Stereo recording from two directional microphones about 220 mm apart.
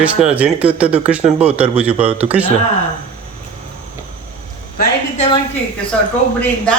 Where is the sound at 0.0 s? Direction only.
5° right (ahead or behind).